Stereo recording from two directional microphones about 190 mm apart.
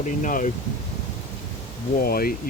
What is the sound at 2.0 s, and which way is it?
Speech, 50° left (ahead or behind).